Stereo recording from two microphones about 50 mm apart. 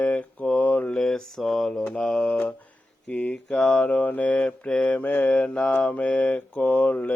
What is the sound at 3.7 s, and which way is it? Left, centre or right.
Mantra, left.